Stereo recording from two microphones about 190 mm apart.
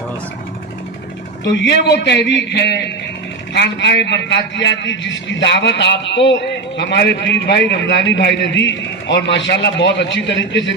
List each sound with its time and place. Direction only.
1.6 s a man's voice: 65° left (ahead or behind)